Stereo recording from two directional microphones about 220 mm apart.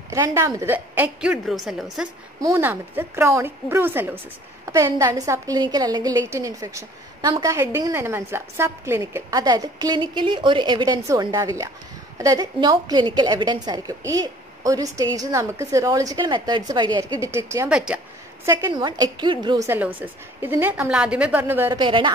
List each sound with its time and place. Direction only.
0.1 s a woman's voice: 15° right (ahead or behind)
21.7 s a woman's voice: 20° right (ahead or behind)